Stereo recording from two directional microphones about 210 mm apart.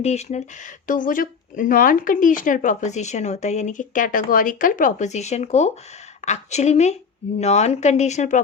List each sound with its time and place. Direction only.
0.0 s speech: 30° left (ahead or behind)